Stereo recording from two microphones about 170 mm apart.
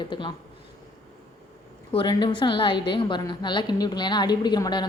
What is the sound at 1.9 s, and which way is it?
A woman's voice, 30° left (ahead or behind).